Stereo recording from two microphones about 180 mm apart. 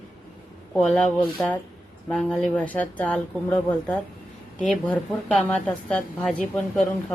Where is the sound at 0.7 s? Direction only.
5° left (ahead or behind).